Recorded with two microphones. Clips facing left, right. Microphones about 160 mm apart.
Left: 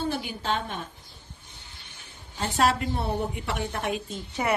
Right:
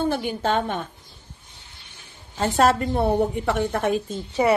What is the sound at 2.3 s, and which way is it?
A woman's voice, 45° right (ahead or behind).